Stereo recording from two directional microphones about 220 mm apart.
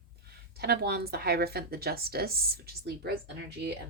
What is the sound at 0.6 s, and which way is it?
Speech, 45° right (ahead or behind).